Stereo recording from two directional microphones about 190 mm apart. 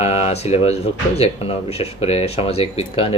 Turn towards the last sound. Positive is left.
turn(degrees=30)  # may be behind; listen again after turning